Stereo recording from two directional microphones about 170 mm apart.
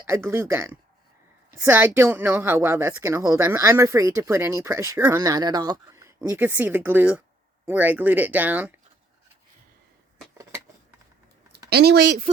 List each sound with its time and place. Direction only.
0.0 s speech: 15° right (ahead or behind)
11.7 s speech: 70° right (ahead or behind)